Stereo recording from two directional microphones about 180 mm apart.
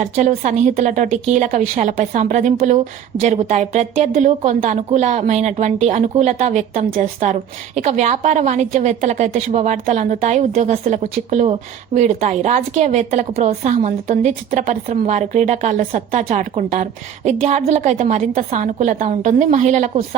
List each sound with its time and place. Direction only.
0.0 s a woman's voice: 45° right (ahead or behind)